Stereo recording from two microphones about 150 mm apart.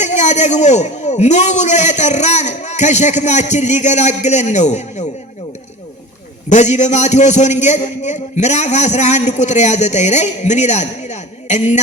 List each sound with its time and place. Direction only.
0.0 s a man's voice: 50° left (ahead or behind)
6.5 s a man's voice: 50° left (ahead or behind)